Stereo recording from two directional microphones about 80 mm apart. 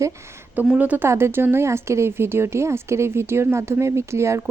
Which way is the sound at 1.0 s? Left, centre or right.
Right.